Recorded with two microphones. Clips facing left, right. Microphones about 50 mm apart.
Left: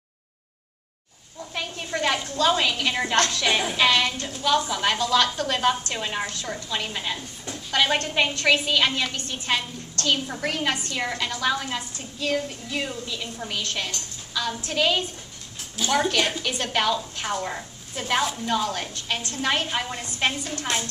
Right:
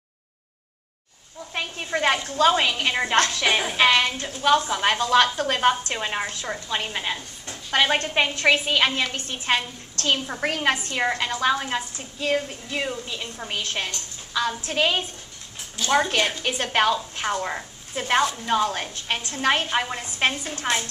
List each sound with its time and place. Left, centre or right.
1.5 s a sound: right
2.2 s a woman's voice: right
7.2 s a woman's voice: centre
7.8 s a woman's voice: centre
11.0 s a woman's voice: right
15.8 s a woman's voice: centre
16.4 s a woman's voice: right
19.7 s a woman's voice: centre